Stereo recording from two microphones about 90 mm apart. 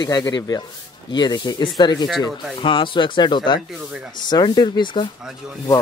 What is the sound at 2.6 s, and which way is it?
Speech, 65° left (ahead or behind).